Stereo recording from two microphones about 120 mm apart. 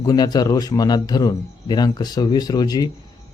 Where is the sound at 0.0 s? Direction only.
35° left (ahead or behind).